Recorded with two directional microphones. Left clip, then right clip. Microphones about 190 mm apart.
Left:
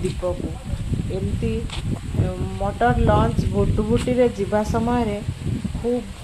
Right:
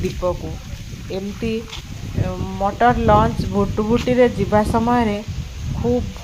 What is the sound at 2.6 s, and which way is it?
Speech, 15° right (ahead or behind).